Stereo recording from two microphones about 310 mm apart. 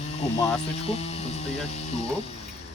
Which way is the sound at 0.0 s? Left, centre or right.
Left.